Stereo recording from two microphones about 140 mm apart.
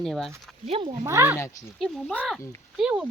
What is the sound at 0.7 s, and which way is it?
Speech, 40° right (ahead or behind).